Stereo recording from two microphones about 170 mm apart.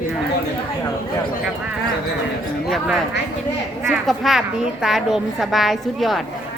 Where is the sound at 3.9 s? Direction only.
Centre (ahead or behind).